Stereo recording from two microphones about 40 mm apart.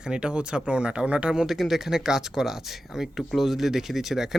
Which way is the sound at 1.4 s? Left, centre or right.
Centre.